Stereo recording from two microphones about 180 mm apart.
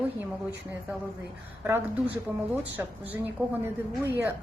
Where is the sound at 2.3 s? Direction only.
10° right (ahead or behind).